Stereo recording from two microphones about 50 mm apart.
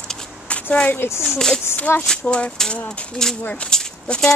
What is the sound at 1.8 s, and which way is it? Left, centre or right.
Speech, left.